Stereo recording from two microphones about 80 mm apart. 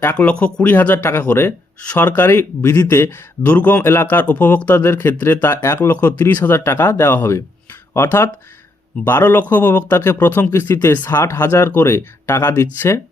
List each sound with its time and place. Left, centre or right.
0.0 s speech: left